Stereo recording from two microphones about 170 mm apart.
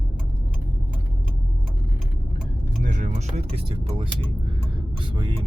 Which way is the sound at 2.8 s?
45° right (ahead or behind).